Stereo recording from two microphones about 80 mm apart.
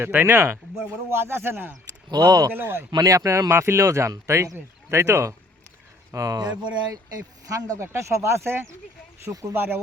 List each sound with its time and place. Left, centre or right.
0.0 s speech: right
2.0 s speech: right
2.5 s speech: right
2.9 s speech: right
6.1 s speech: right